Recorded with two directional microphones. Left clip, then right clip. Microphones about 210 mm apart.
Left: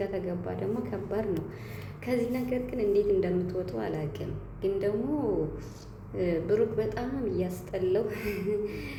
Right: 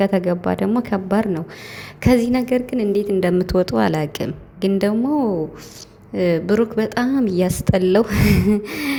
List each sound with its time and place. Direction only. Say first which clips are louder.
0.0 s a woman's voice: right 14 dB; 45° right (ahead or behind)
6.1 s a woman's voice: right 9 dB; 45° right (ahead or behind)